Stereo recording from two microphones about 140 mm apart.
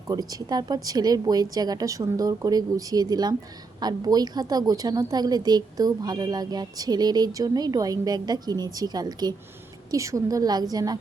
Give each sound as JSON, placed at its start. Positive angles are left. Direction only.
{"t": 0.1, "sound": "a woman's voice", "side_deg": -25}